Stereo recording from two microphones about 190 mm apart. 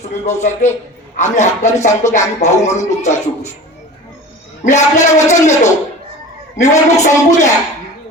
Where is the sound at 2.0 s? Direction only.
15° left (ahead or behind).